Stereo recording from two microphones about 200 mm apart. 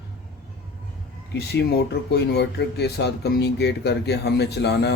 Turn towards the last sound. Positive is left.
turn(degrees=55)  # may be behind; listen again after turning